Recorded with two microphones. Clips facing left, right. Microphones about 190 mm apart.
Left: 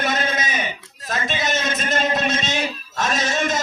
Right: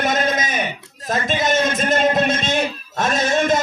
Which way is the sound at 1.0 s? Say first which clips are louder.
Right 5 dB; 50° right (ahead or behind).